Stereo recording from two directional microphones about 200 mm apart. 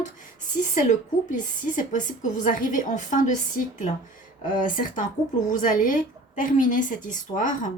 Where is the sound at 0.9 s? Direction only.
40° left (ahead or behind).